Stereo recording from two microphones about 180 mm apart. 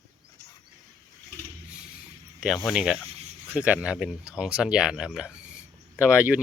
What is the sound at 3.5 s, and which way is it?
Speech, 10° right (ahead or behind).